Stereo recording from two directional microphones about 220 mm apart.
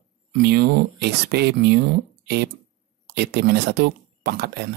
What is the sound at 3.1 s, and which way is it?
Speech, 50° right (ahead or behind).